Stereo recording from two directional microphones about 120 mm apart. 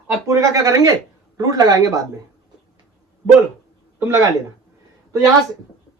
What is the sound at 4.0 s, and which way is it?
Speech, 20° right (ahead or behind).